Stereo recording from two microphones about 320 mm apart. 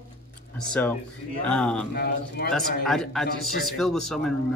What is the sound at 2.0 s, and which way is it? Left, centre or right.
Speech, left.